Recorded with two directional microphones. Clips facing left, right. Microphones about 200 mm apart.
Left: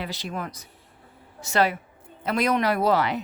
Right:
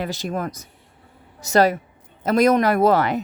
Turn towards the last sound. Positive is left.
turn(degrees=-50)  # may be behind; listen again after turning